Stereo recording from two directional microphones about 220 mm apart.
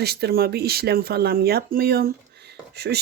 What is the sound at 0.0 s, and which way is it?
Speech, 45° right (ahead or behind).